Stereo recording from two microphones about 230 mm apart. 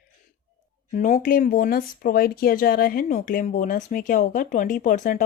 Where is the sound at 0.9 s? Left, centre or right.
Left.